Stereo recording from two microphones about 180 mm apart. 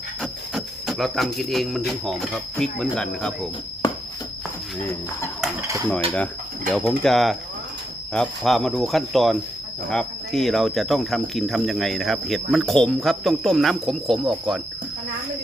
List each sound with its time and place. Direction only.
0.2 s a sound: centre (ahead or behind)
1.9 s cricket: centre (ahead or behind)
6.7 s cricket: 5° left (ahead or behind)